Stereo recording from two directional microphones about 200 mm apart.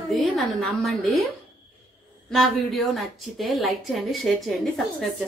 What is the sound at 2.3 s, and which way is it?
A woman's voice, centre (ahead or behind).